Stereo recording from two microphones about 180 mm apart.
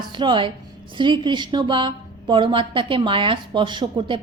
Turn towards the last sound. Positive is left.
turn(degrees=-25)  # may be behind; listen again after turning